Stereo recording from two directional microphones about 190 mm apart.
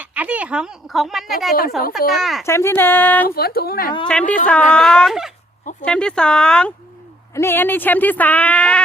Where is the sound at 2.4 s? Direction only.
15° left (ahead or behind).